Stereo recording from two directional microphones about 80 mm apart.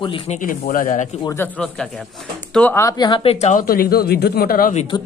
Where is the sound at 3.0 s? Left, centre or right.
Left.